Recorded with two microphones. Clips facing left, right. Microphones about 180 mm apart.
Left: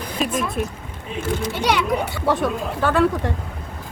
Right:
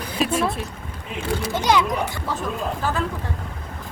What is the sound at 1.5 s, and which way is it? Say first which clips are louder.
Speech: right 1 dB; 65° left (ahead or behind).